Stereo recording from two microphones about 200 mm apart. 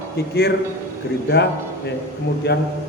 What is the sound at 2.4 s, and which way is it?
Speech, 55° left (ahead or behind).